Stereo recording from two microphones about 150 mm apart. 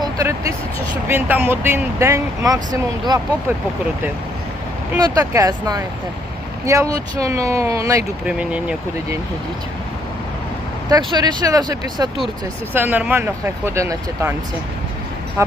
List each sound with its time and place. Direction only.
0.0 s speech: 20° right (ahead or behind)
4.9 s speech: 25° right (ahead or behind)
8.3 s speech: 5° right (ahead or behind)
10.8 s speech: 25° right (ahead or behind)
12.7 s speech: 10° right (ahead or behind)
15.4 s speech: 20° right (ahead or behind)